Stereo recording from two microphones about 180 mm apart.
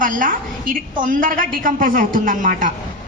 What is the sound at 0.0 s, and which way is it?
A woman's voice, 50° right (ahead or behind).